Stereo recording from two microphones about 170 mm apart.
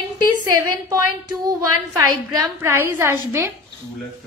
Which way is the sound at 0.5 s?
20° right (ahead or behind).